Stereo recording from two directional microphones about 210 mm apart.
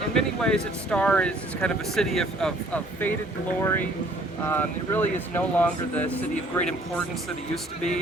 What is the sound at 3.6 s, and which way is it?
Speech, 10° left (ahead or behind).